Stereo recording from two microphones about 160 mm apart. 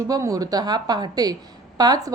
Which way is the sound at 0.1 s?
20° right (ahead or behind).